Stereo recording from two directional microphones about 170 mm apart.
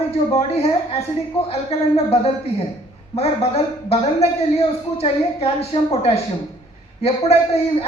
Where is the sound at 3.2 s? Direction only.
35° left (ahead or behind).